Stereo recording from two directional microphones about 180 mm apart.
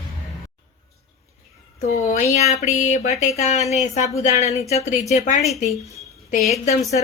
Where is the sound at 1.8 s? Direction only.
40° left (ahead or behind).